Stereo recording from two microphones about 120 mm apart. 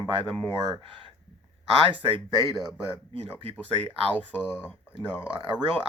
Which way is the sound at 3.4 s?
55° right (ahead or behind).